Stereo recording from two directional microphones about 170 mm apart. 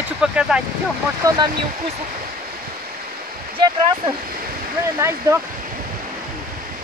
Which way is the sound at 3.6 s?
30° right (ahead or behind).